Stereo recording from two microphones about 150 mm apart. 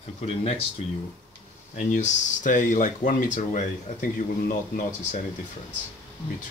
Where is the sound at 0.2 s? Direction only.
40° left (ahead or behind).